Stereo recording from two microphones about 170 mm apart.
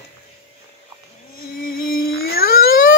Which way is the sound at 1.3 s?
60° left (ahead or behind).